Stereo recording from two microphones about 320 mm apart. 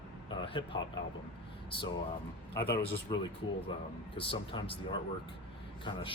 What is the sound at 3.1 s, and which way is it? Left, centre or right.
Speech, centre.